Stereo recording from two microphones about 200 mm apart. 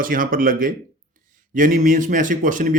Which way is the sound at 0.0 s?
45° right (ahead or behind).